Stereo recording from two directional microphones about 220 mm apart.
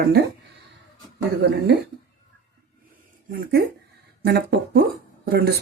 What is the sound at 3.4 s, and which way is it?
Speech, 45° right (ahead or behind).